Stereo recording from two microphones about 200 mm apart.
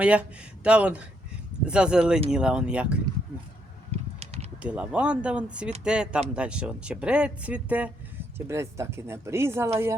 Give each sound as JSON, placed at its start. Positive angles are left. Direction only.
{"t": 0.0, "sound": "speech", "side_deg": -5}
{"t": 4.2, "sound": "a sound", "side_deg": -30}
{"t": 4.6, "sound": "speech", "side_deg": -5}